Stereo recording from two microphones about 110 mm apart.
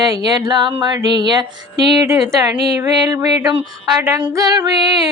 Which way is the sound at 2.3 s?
30° right (ahead or behind).